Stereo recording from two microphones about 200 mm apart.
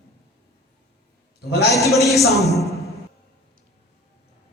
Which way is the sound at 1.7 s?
Centre (ahead or behind).